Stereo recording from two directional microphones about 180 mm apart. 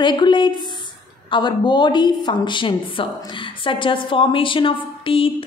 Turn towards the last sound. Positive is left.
turn(degrees=30)  # may be behind; listen again after turning